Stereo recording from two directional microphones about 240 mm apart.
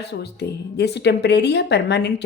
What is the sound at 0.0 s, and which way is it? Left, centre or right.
A woman's voice, left.